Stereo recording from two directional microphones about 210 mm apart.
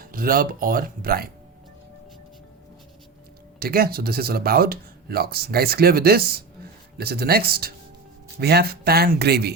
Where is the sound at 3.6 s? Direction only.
45° right (ahead or behind).